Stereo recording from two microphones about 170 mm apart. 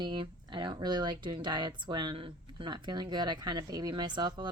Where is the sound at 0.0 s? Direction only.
25° right (ahead or behind).